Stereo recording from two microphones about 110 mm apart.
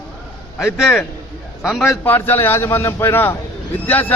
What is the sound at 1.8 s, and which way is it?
Speech, 20° left (ahead or behind).